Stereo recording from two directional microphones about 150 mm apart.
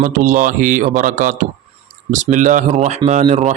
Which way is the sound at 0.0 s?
60° right (ahead or behind).